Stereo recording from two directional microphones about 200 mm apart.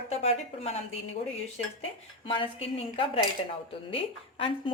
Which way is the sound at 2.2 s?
25° left (ahead or behind).